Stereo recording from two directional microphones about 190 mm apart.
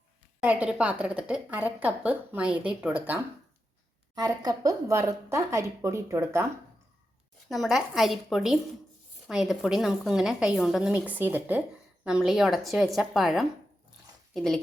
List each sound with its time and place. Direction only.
0.3 s a woman's voice: 5° right (ahead or behind)
4.1 s a woman's voice: 20° right (ahead or behind)
7.4 s a woman's voice: centre (ahead or behind)